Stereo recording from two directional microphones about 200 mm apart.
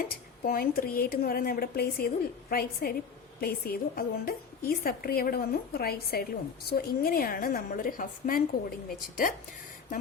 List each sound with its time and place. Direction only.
0.4 s a woman's voice: 45° left (ahead or behind)